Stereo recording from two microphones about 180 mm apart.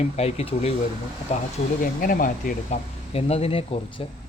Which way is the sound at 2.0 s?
50° left (ahead or behind).